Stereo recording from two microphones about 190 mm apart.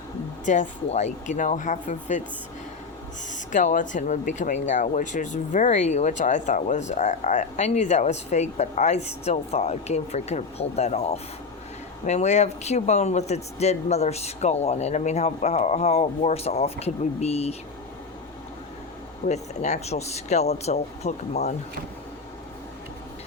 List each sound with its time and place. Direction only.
0.4 s speech: 40° left (ahead or behind)
3.3 s speech: 40° left (ahead or behind)
19.3 s speech: 35° left (ahead or behind)